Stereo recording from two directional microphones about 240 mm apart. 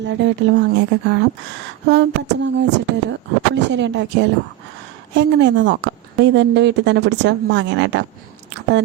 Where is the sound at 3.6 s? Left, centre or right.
Right.